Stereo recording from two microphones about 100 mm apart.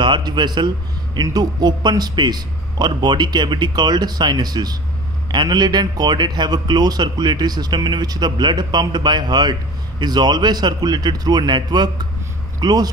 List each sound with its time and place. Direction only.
0.0 s a man's voice: 50° right (ahead or behind)